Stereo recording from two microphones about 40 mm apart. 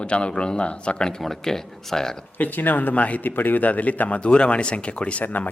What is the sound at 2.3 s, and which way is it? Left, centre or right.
Speech, left.